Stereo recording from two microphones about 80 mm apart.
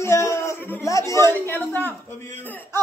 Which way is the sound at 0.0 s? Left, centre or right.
Left.